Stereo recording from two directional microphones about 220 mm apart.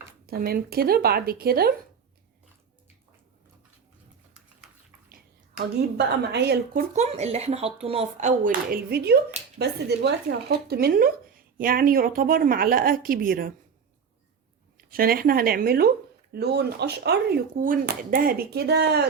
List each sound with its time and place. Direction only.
0.3 s speech: 45° right (ahead or behind)
5.0 s a woman's voice: 45° right (ahead or behind)
6.9 s speech: 30° right (ahead or behind)
14.8 s speech: 40° right (ahead or behind)